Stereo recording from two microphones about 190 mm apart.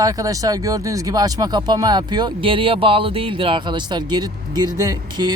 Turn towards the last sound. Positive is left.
turn(degrees=-20)  # may be behind; listen again after turning